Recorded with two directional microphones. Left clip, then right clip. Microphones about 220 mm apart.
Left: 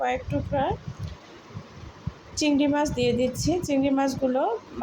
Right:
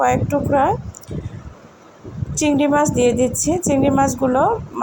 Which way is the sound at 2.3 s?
15° right (ahead or behind).